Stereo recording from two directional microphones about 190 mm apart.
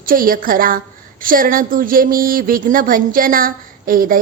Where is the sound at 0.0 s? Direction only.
45° right (ahead or behind).